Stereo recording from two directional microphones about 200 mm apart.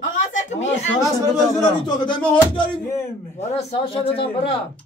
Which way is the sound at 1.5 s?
20° left (ahead or behind).